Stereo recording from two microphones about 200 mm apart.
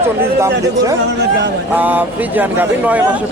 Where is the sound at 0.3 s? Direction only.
15° right (ahead or behind).